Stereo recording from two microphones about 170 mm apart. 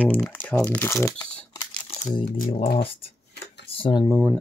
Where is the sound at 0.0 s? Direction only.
10° left (ahead or behind).